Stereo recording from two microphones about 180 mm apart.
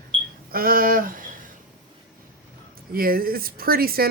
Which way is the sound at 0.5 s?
55° right (ahead or behind).